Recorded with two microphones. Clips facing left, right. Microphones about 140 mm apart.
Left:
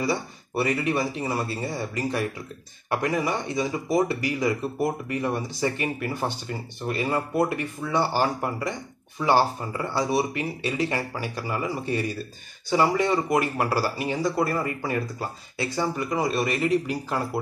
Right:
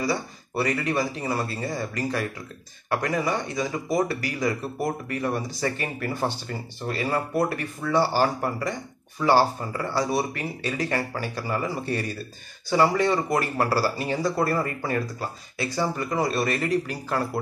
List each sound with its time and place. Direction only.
0.0 s speech: 25° left (ahead or behind)
5.6 s speech: 15° left (ahead or behind)